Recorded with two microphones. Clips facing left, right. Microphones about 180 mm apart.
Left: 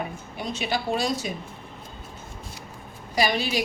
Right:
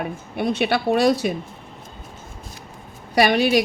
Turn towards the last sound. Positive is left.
turn(degrees=-60)  # may be behind; listen again after turning